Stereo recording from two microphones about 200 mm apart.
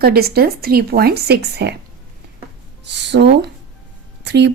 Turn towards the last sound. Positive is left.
turn(degrees=-55)  # may be behind; listen again after turning